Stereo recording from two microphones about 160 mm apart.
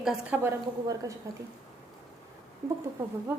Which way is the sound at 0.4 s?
20° right (ahead or behind).